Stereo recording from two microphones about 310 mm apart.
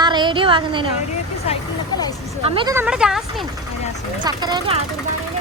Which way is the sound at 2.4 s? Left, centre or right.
Centre.